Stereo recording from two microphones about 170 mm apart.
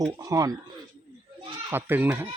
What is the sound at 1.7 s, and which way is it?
Speech, 10° right (ahead or behind).